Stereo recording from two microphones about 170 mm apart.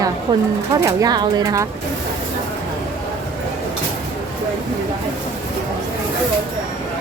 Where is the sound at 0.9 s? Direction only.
20° right (ahead or behind).